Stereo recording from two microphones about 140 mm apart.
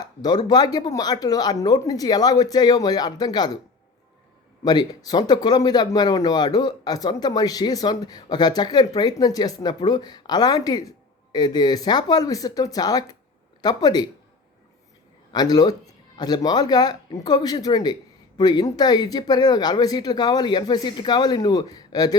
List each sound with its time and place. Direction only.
0.0 s speech: 30° left (ahead or behind)
4.6 s speech: 30° left (ahead or behind)
15.3 s speech: 30° left (ahead or behind)